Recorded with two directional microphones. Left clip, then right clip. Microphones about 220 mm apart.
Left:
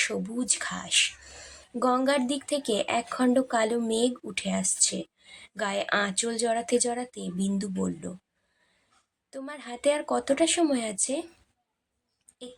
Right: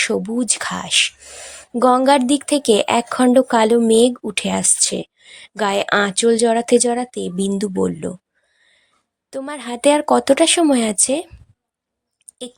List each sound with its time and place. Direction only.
0.0 s speech: 35° right (ahead or behind)
9.3 s speech: 45° right (ahead or behind)